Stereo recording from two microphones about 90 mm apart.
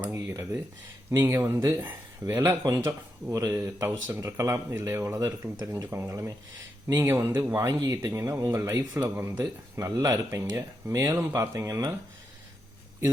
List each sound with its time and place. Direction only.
0.3 s speech: 35° right (ahead or behind)